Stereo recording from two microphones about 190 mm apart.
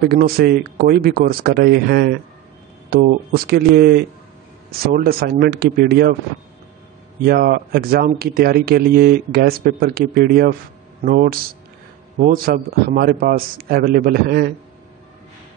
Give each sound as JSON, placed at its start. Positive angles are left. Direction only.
{"t": 0.0, "sound": "speech", "side_deg": -55}
{"t": 7.2, "sound": "speech", "side_deg": -50}